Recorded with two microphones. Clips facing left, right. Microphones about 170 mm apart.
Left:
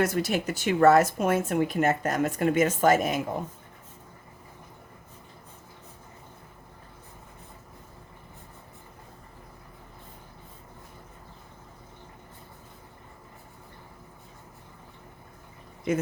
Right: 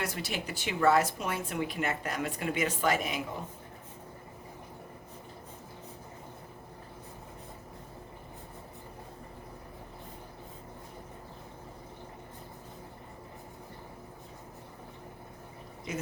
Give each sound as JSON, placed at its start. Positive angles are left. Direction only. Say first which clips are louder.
{"t": 0.0, "sound": "speech", "louder": "left 10 dB", "side_deg": 45}